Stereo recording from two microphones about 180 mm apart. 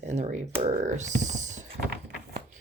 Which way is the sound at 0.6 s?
40° right (ahead or behind).